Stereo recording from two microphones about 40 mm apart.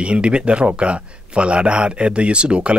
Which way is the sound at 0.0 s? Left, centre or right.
Right.